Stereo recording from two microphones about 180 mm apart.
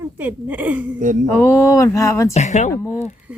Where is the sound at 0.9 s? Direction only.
45° right (ahead or behind).